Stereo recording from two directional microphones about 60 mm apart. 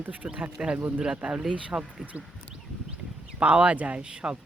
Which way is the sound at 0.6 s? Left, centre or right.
Centre.